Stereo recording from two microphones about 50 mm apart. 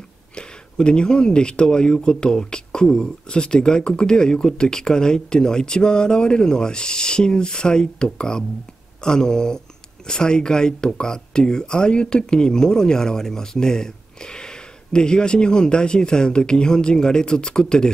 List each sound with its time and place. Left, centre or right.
0.3 s speech: centre